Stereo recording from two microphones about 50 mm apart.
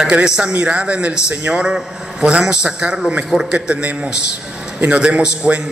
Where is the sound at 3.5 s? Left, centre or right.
Right.